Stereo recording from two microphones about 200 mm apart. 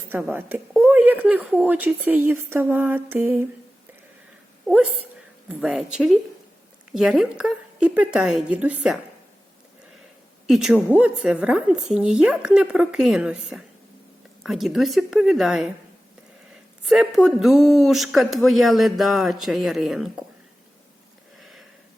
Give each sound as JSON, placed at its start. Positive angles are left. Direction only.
{"t": 0.1, "sound": "speech", "side_deg": -10}
{"t": 4.6, "sound": "speech", "side_deg": -5}
{"t": 10.4, "sound": "a woman's voice", "side_deg": 0}
{"t": 16.8, "sound": "speech", "side_deg": 0}
{"t": 21.3, "sound": "sniff", "side_deg": 0}